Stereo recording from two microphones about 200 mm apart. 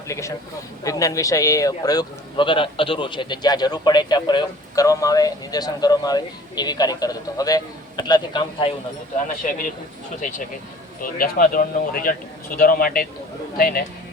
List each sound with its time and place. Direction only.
0.1 s a man's voice: 15° left (ahead or behind)
9.4 s a man's voice: 40° left (ahead or behind)
11.0 s speech: 45° left (ahead or behind)